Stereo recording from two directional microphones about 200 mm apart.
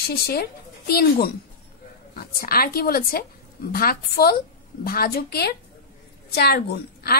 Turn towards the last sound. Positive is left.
turn(degrees=50)  # may be behind; listen again after turning